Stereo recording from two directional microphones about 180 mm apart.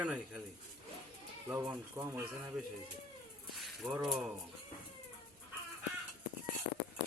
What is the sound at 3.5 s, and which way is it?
Speech, centre (ahead or behind).